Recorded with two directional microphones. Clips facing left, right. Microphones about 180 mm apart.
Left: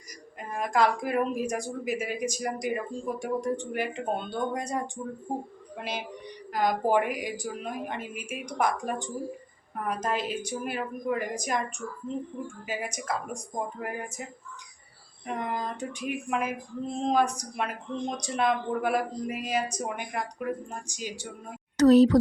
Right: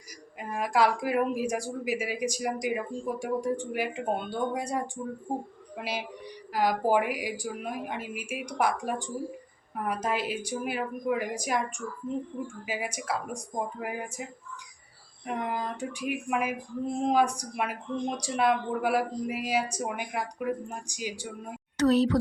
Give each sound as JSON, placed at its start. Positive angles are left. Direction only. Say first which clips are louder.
{"t": 0.3, "sound": "a woman's voice", "louder": "even", "side_deg": -10}
{"t": 12.6, "sound": "a woman's voice", "louder": "left 1 dB", "side_deg": -10}
{"t": 15.3, "sound": "a woman's voice", "louder": "even", "side_deg": -5}
{"t": 21.8, "sound": "speech", "louder": "left 6 dB", "side_deg": 40}